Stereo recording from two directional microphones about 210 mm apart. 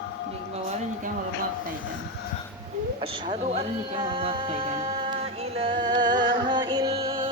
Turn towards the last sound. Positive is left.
turn(degrees=-15)  # may be behind; listen again after turning